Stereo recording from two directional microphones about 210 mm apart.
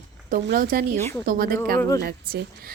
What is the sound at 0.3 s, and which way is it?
A woman's voice, 50° right (ahead or behind).